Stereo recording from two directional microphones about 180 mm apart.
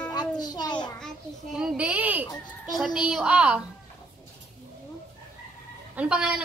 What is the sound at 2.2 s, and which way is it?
Speech, 20° left (ahead or behind).